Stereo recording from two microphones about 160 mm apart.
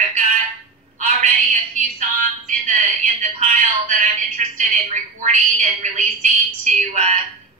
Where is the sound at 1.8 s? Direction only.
55° right (ahead or behind).